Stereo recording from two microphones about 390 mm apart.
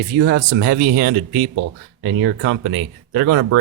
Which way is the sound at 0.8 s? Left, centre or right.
Right.